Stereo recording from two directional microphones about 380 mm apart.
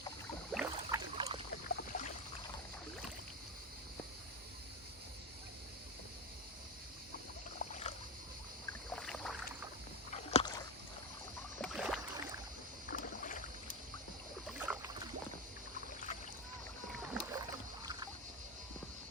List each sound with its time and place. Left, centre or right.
0.5 s rowboat: centre
1.6 s boat: left
7.6 s boat: centre
8.9 s rowboat: centre
10.1 s rowboat: centre
11.6 s rowboat: centre
12.9 s rowboat: left
14.7 s rowboat: centre
16.9 s rowboat: centre